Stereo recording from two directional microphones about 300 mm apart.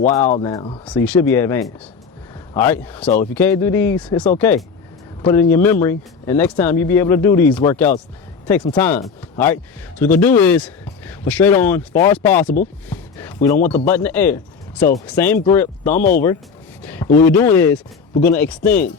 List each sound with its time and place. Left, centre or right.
0.4 s speech: centre
16.8 s a sound: centre
17.2 s speech: centre